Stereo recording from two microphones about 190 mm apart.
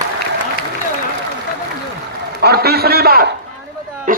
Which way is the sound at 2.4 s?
55° right (ahead or behind).